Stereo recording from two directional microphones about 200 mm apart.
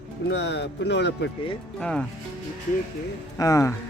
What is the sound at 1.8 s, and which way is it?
Speech, 5° left (ahead or behind).